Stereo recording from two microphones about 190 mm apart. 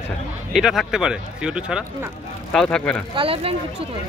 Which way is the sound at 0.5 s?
Centre (ahead or behind).